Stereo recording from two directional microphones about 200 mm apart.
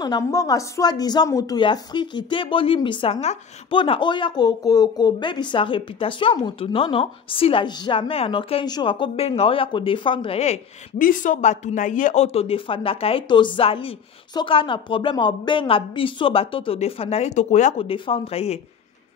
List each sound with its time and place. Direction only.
0.0 s a woman's voice: 20° left (ahead or behind)